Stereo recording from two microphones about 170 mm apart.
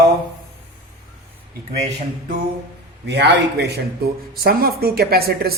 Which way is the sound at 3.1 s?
85° right.